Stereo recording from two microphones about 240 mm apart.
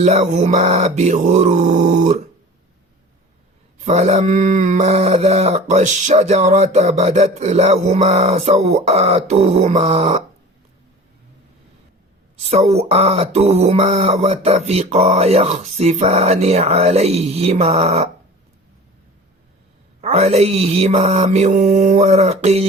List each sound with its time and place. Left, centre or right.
0.0 s speech: right
3.8 s speech: right
12.5 s speech: right
20.0 s speech: right